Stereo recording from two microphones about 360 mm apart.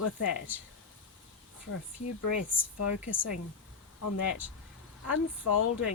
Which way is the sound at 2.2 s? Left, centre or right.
Left.